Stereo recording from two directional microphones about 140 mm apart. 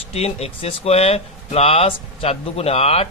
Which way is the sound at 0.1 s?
45° left (ahead or behind).